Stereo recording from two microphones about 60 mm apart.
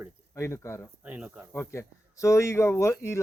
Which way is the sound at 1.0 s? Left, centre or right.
Right.